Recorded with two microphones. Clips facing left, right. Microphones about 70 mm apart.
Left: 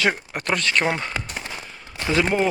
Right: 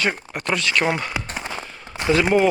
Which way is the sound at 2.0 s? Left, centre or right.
Right.